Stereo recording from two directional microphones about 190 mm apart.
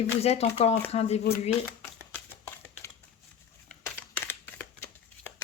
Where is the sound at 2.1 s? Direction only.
10° left (ahead or behind).